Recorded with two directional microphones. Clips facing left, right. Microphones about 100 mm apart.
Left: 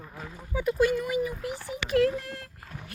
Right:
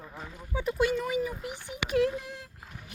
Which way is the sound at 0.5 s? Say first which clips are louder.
Left 3 dB; 25° right (ahead or behind).